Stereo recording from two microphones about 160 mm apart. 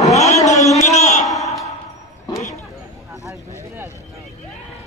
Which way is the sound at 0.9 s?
45° left (ahead or behind).